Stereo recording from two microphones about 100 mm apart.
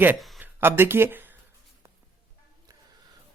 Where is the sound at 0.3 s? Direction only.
20° right (ahead or behind).